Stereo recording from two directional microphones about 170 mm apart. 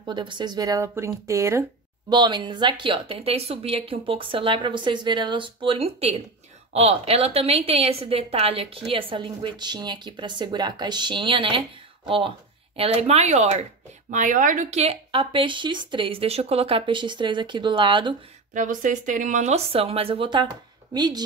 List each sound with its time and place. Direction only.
0.0 s a woman's voice: 25° right (ahead or behind)
2.0 s a woman's voice: 25° right (ahead or behind)
18.5 s a woman's voice: 50° right (ahead or behind); by 21.2 s 25° right (ahead or behind)